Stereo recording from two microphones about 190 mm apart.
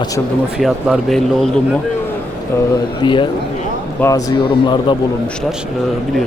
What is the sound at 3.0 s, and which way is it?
A man's voice, 25° left (ahead or behind).